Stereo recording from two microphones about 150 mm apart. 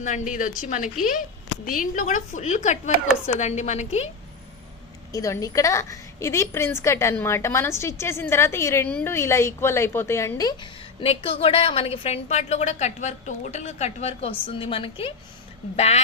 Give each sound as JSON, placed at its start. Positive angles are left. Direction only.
{"t": 0.0, "sound": "a woman's voice", "side_deg": 60}
{"t": 5.1, "sound": "a woman's voice", "side_deg": 20}
{"t": 11.0, "sound": "a woman's voice", "side_deg": 40}